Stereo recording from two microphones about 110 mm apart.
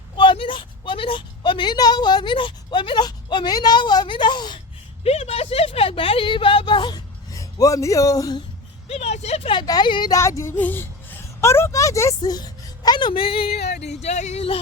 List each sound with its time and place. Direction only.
0.2 s a woman's voice: 50° left (ahead or behind)
5.0 s a sound: 70° left (ahead or behind); by 8.4 s 30° left (ahead or behind)
8.9 s vehicle: 75° left (ahead or behind)
9.6 s a woman's voice: 40° left (ahead or behind)
10.2 s a woman's voice: 25° left (ahead or behind); by 13.5 s 60° left (ahead or behind)
14.0 s speech: 90° left; by 14.6 s 65° left (ahead or behind)